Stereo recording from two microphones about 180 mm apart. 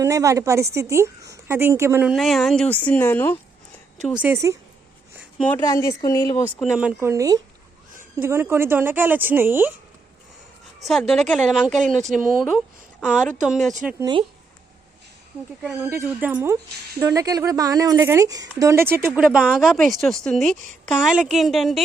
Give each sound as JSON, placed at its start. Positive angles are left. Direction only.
{"t": 0.0, "sound": "speech", "side_deg": -15}
{"t": 2.1, "sound": "a woman's voice", "side_deg": 0}
{"t": 4.0, "sound": "speech", "side_deg": -5}
{"t": 5.4, "sound": "speech", "side_deg": 10}
{"t": 6.6, "sound": "speech", "side_deg": -5}
{"t": 10.8, "sound": "a woman's voice", "side_deg": 0}
{"t": 14.0, "sound": "speech", "side_deg": -25}
{"t": 15.6, "sound": "a woman's voice", "side_deg": 0}